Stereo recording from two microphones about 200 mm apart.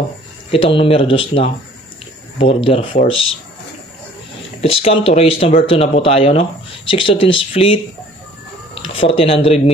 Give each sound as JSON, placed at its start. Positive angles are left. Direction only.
{"t": 0.5, "sound": "speech", "side_deg": 25}
{"t": 4.6, "sound": "speech", "side_deg": 30}
{"t": 8.7, "sound": "a sound", "side_deg": 25}
{"t": 9.1, "sound": "speech", "side_deg": 30}